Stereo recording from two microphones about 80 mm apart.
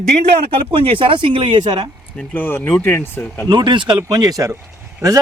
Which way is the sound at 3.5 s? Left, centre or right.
Right.